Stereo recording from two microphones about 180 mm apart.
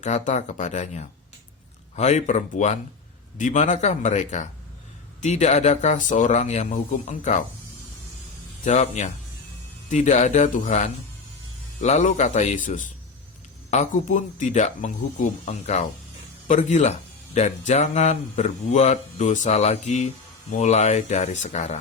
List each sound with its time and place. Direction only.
0.0 s speech: 40° left (ahead or behind)
8.6 s speech: 40° left (ahead or behind)